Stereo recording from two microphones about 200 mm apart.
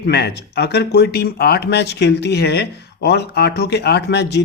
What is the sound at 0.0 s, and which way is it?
Speech, 55° left (ahead or behind).